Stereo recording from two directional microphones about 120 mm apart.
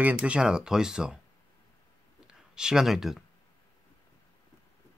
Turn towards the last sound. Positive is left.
turn(degrees=0)  # may be behind; listen again after turning